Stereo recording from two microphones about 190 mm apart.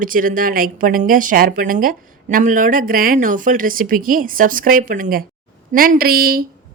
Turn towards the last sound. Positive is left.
turn(degrees=-50)  # may be behind; listen again after turning